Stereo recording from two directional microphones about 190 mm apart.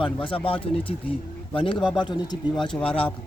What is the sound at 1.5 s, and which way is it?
Speech, 25° left (ahead or behind).